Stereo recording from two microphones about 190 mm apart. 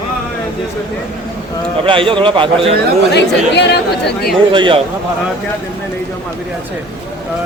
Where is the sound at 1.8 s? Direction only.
25° right (ahead or behind).